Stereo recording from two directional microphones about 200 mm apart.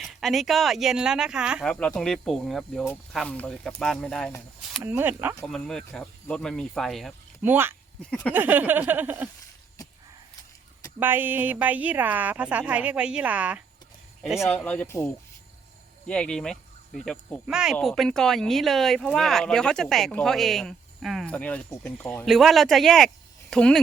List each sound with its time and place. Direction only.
0.0 s speech: centre (ahead or behind)
4.8 s a woman's voice: 10° right (ahead or behind)
5.4 s speech: 5° left (ahead or behind)
7.4 s a woman's voice: 10° right (ahead or behind)
11.0 s a woman's voice: 10° right (ahead or behind)